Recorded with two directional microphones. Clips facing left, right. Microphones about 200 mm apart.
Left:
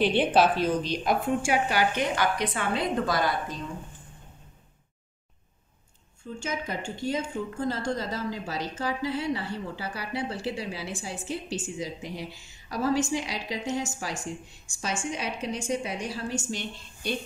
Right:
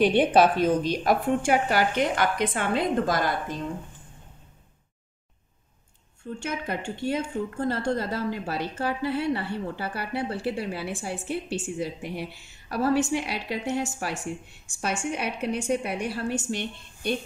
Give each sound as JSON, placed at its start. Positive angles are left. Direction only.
{"t": 0.1, "sound": "a woman's voice", "side_deg": -55}
{"t": 6.4, "sound": "a woman's voice", "side_deg": -60}